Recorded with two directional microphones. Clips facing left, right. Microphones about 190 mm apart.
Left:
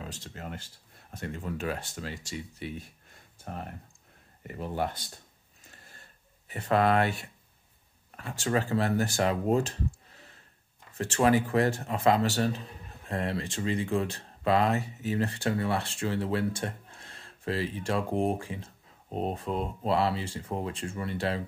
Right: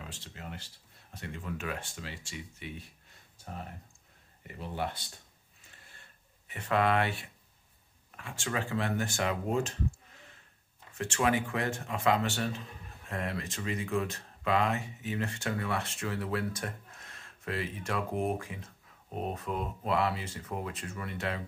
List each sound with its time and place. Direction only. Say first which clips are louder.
0.0 s speech: left 5 dB; 45° left (ahead or behind)
4.4 s speech: left 4 dB; 45° left (ahead or behind)
6.4 s speech: left 4 dB; 35° left (ahead or behind)